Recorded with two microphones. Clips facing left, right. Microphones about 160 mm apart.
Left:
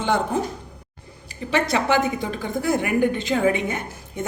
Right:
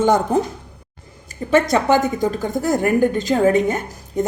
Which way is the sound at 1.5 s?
45° right (ahead or behind).